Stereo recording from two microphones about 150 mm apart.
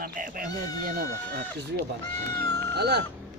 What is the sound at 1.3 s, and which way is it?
Speech, 90° right.